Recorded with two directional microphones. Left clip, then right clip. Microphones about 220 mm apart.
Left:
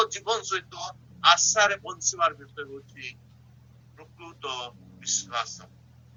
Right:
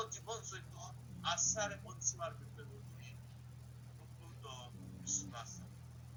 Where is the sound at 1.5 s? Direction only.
50° left (ahead or behind).